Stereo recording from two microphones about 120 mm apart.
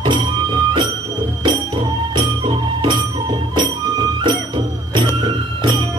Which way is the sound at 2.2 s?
40° right (ahead or behind).